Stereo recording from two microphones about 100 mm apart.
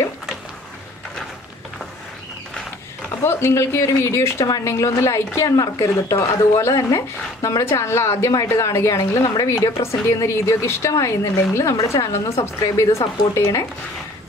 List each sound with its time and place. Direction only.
3.3 s a woman's voice: 25° left (ahead or behind)
12.6 s a woman's voice: 40° left (ahead or behind)